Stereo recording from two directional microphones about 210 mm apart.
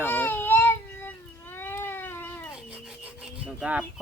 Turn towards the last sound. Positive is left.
turn(degrees=-5)  # may be behind; listen again after turning